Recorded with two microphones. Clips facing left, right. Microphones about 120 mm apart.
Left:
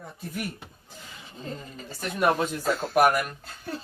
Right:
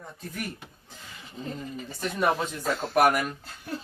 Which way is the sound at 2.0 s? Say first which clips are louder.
Left 2 dB; 5° left (ahead or behind).